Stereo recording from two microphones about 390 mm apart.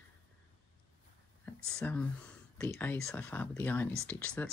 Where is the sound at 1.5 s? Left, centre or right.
Centre.